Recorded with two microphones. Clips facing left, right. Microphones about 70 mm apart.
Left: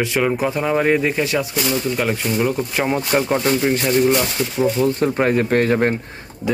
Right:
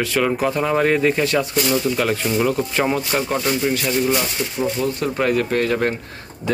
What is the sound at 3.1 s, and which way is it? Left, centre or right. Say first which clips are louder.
Speech: left 3 dB; centre.